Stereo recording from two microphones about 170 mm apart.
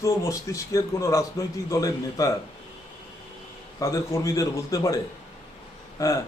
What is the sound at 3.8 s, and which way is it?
A man's voice, 20° left (ahead or behind).